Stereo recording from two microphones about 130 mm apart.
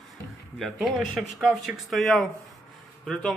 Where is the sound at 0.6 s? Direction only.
Centre (ahead or behind).